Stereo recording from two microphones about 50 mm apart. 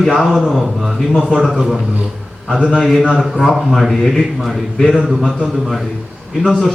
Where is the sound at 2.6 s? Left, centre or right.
Centre.